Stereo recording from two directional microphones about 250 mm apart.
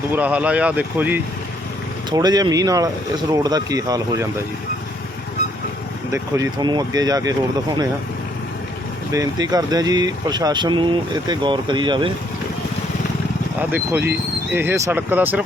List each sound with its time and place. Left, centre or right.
0.1 s speech: centre
6.1 s speech: centre
9.1 s speech: centre
13.6 s speech: centre